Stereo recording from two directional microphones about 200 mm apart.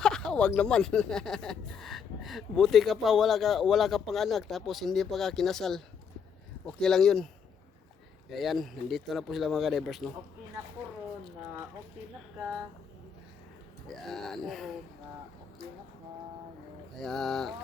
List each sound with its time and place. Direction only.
0.0 s speech: 5° left (ahead or behind)
8.3 s speech: centre (ahead or behind)
14.1 s speech: centre (ahead or behind)
16.9 s speech: centre (ahead or behind)